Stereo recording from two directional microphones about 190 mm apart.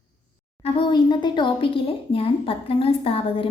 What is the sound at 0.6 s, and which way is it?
Speech, 25° left (ahead or behind).